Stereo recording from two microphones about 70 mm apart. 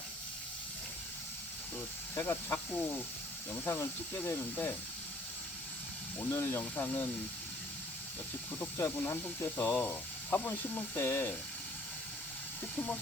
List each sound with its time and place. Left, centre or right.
2.1 s speech: left
4.1 s speech: left
6.3 s speech: left
8.8 s speech: left
9.7 s speech: left
10.9 s speech: left